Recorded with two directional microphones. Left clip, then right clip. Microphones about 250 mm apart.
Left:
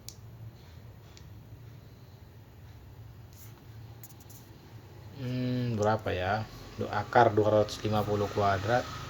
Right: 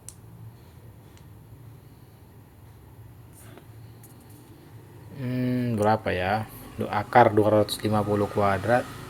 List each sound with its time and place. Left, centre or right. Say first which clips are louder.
5.1 s speech: right 6 dB; right